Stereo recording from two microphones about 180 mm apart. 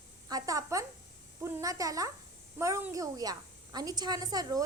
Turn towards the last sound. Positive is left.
turn(degrees=-20)  # may be behind; listen again after turning